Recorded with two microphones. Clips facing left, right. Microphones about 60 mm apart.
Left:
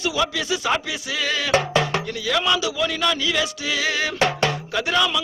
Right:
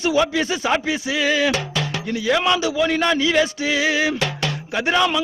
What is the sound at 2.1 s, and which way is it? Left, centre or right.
Speech, right.